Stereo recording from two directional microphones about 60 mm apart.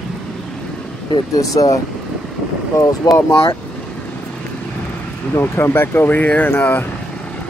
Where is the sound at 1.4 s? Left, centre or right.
Left.